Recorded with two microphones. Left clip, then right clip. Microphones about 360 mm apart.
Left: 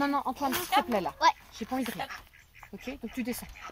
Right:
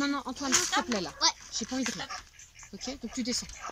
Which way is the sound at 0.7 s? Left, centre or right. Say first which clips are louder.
Left 3 dB; centre.